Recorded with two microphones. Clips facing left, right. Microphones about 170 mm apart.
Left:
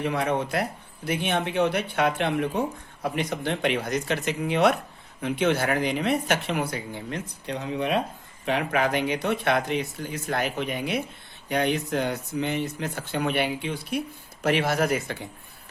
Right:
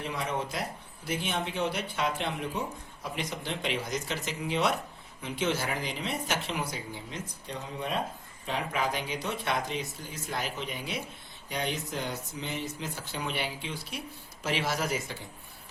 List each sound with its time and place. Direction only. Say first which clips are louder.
0.0 s speech: left 7 dB; 65° left (ahead or behind)